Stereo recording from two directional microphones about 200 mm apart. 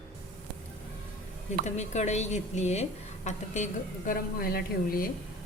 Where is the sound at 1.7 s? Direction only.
35° left (ahead or behind).